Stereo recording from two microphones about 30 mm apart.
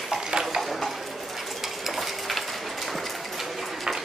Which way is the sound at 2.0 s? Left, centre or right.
Centre.